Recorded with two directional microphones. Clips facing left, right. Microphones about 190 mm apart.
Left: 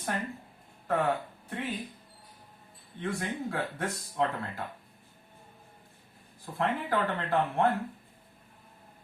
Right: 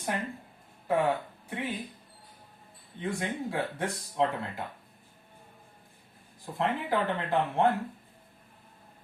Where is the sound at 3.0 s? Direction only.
20° right (ahead or behind).